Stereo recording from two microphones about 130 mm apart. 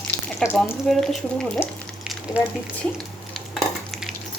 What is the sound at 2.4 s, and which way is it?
Speech, 10° right (ahead or behind).